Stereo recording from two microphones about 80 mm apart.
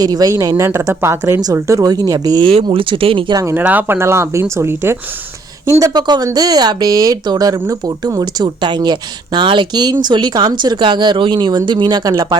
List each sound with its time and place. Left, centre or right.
0.0 s speech: right
1.9 s speech: right
2.6 s speech: right
3.6 s speech: right
5.9 s speech: right